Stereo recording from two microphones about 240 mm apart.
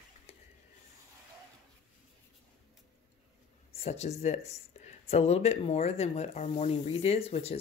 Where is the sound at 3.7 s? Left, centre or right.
Left.